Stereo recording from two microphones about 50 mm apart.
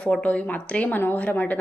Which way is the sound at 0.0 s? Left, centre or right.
Left.